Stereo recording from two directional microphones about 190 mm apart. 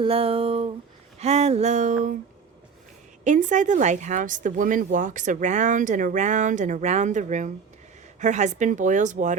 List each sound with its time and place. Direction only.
0.0 s a sound: 30° right (ahead or behind)
1.2 s speech: 35° right (ahead or behind)
3.2 s speech: 40° right (ahead or behind)